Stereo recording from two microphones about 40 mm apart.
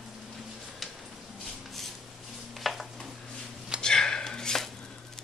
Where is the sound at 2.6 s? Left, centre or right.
Centre.